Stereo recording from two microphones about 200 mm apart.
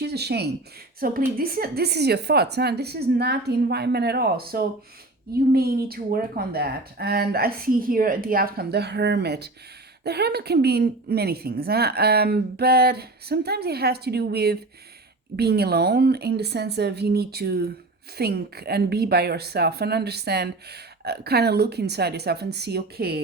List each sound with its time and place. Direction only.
0.0 s a woman's voice: 55° right (ahead or behind)